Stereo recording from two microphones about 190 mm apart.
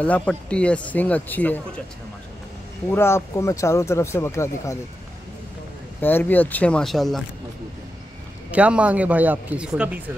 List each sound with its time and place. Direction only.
0.0 s speech: 5° left (ahead or behind)
2.9 s speech: 15° left (ahead or behind)
5.9 s speech: 10° left (ahead or behind)
8.5 s a man's voice: 5° right (ahead or behind)